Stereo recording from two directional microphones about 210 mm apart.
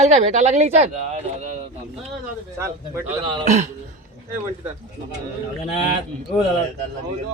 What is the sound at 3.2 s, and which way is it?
Speech, 25° right (ahead or behind).